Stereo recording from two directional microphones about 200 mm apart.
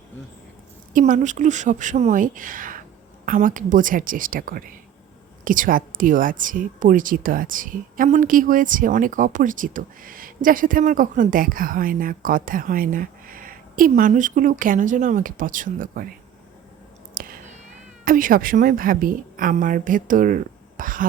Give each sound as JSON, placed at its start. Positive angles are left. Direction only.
{"t": 0.9, "sound": "speech", "side_deg": -40}
{"t": 17.2, "sound": "a sound", "side_deg": -45}
{"t": 18.0, "sound": "speech", "side_deg": -45}